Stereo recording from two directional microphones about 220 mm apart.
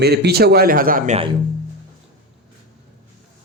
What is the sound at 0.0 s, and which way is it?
Speech, 50° right (ahead or behind).